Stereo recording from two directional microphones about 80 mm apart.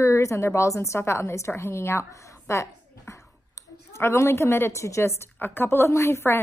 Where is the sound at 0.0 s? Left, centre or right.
Left.